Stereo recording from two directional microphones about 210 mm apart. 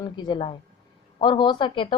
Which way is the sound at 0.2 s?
20° left (ahead or behind).